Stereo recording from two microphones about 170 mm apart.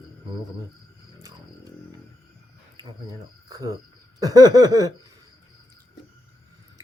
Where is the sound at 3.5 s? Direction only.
20° right (ahead or behind).